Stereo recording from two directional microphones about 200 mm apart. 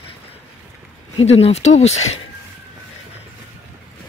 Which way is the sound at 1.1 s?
30° left (ahead or behind).